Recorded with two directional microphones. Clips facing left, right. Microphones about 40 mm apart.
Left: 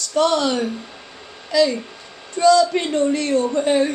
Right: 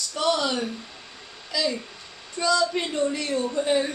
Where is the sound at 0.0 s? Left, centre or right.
Left.